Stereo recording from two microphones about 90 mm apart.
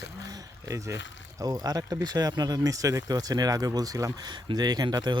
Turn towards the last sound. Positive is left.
turn(degrees=-55)  # may be behind; listen again after turning